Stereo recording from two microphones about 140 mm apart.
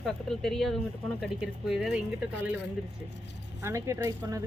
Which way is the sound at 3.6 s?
20° right (ahead or behind).